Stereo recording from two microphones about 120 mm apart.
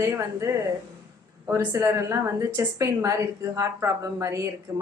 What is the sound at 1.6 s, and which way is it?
Speech, 25° right (ahead or behind).